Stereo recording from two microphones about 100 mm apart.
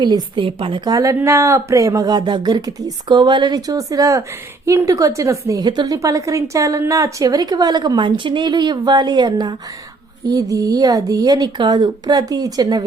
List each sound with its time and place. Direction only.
0.0 s speech: 45° right (ahead or behind)
0.9 s speech: 35° right (ahead or behind)
5.6 s a woman's voice: 45° right (ahead or behind)